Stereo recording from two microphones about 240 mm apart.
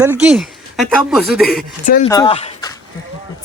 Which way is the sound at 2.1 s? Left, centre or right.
Left.